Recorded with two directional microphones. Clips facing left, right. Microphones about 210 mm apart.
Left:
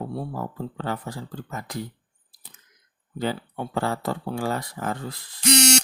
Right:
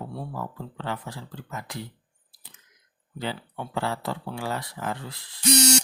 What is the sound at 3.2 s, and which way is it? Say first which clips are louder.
Speech: left 5 dB; 45° left (ahead or behind).